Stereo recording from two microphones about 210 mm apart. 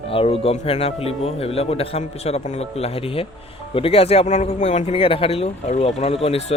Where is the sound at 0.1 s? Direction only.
25° left (ahead or behind).